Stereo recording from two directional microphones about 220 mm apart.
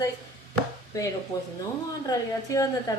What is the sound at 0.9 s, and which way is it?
A woman's voice, 15° left (ahead or behind).